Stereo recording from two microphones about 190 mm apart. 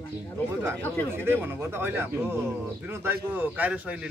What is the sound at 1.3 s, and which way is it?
Speech, 10° right (ahead or behind).